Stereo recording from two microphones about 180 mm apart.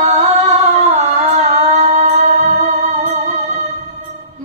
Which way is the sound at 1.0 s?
40° right (ahead or behind).